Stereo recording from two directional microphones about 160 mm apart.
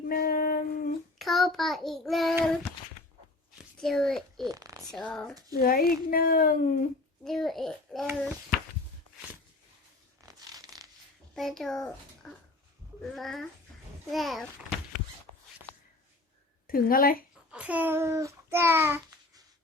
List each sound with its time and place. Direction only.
0.1 s female singing: 65° left (ahead or behind)
1.2 s child singing: centre (ahead or behind)
3.6 s a child's voice: centre (ahead or behind)
4.5 s speech: 20° right (ahead or behind)
4.8 s child singing: 5° left (ahead or behind)
5.5 s speech: 65° left (ahead or behind)
7.3 s child singing: centre (ahead or behind)
10.2 s zipper: 20° right (ahead or behind)
11.3 s child singing: centre (ahead or behind)
16.6 s speech: 65° left (ahead or behind)
17.5 s a child's voice: 10° right (ahead or behind)